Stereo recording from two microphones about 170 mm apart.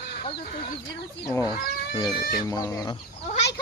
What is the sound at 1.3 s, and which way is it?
Speech, 20° left (ahead or behind).